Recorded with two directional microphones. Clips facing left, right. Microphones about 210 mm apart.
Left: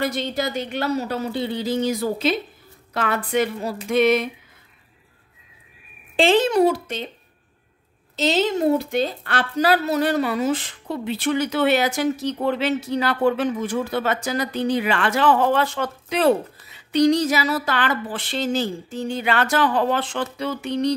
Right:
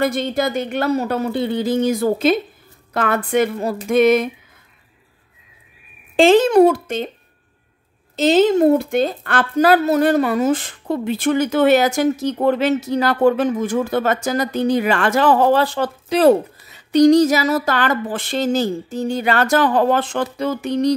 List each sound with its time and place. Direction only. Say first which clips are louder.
0.0 s a woman's voice: right 5 dB; 50° right (ahead or behind)
6.1 s a woman's voice: right 6 dB; 45° right (ahead or behind)
8.2 s a woman's voice: right 7 dB; 50° right (ahead or behind)